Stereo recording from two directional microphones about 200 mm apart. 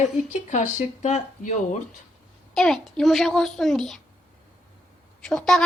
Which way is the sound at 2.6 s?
Centre (ahead or behind).